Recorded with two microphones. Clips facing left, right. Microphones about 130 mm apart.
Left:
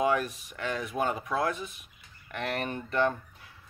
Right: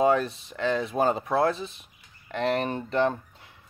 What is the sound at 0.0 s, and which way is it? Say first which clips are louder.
Speech: right 5 dB; 30° right (ahead or behind).